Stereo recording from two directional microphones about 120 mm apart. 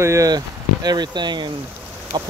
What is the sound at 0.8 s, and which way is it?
Speech, 35° right (ahead or behind).